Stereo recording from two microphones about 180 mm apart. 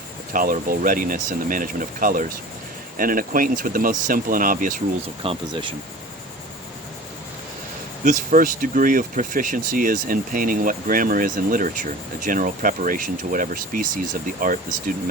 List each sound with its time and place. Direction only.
0.3 s speech: 50° right (ahead or behind)
5.2 s speech: 30° right (ahead or behind)
8.0 s speech: 45° right (ahead or behind)